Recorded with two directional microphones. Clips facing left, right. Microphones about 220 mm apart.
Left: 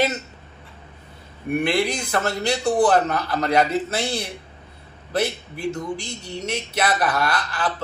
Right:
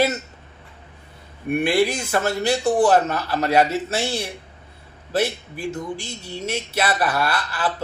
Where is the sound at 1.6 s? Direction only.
5° right (ahead or behind).